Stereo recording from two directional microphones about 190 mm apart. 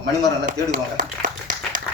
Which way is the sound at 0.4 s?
45° right (ahead or behind).